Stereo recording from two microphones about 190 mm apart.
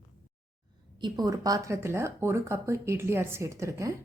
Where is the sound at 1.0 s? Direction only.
20° right (ahead or behind).